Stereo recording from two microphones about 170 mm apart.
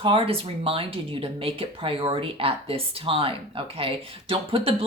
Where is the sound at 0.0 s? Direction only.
35° right (ahead or behind).